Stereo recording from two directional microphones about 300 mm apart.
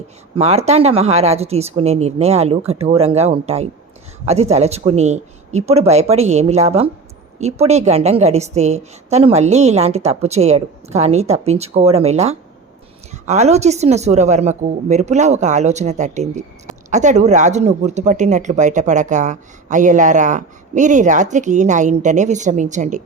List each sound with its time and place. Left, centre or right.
0.3 s a woman's voice: right